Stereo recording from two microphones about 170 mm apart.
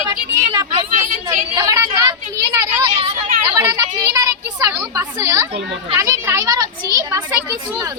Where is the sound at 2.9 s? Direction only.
35° right (ahead or behind).